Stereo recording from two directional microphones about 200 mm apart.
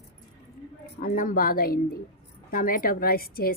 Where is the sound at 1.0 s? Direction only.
45° left (ahead or behind).